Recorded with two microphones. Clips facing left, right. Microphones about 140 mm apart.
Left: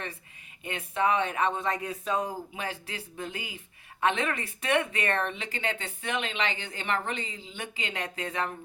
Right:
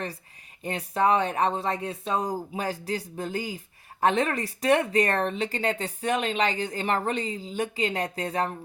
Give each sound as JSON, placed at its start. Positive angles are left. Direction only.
{"t": 0.6, "sound": "speech", "side_deg": -35}